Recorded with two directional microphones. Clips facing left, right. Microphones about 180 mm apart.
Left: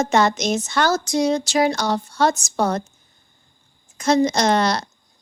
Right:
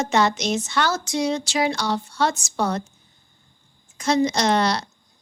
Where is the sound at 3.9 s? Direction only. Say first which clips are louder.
Left 3 dB; 45° left (ahead or behind).